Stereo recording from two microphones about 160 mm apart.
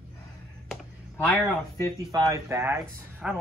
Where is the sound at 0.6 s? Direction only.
10° left (ahead or behind).